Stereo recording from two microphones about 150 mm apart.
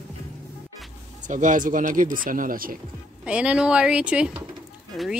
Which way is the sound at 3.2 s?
5° right (ahead or behind).